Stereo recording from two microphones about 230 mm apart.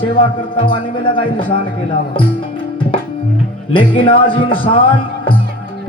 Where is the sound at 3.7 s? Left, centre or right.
Left.